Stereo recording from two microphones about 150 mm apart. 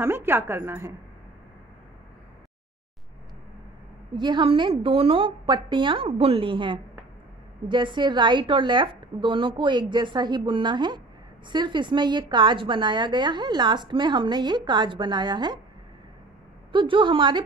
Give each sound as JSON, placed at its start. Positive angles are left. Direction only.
{"t": 0.0, "sound": "a woman's voice", "side_deg": -15}
{"t": 4.1, "sound": "a woman's voice", "side_deg": -30}
{"t": 16.7, "sound": "a woman's voice", "side_deg": -35}